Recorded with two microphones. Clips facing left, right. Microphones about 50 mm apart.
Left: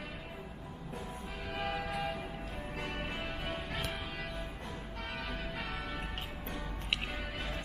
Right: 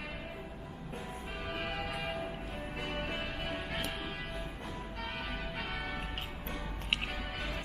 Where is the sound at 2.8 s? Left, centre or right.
Right.